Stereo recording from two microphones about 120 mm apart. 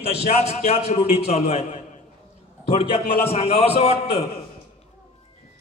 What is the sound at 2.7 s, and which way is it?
Speech, 55° left (ahead or behind).